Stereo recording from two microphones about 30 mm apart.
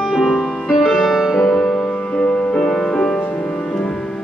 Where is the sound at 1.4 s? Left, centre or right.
Centre.